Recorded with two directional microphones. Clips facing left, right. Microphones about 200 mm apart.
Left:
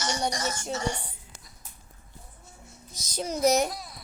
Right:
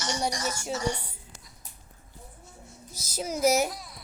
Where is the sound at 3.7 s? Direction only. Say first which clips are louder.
Left 3 dB; 40° left (ahead or behind).